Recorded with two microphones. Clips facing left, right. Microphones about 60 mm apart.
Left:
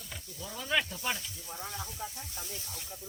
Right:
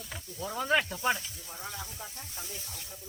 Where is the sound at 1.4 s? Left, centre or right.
Centre.